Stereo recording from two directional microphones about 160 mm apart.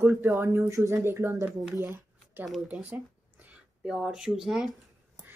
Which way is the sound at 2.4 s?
Centre (ahead or behind).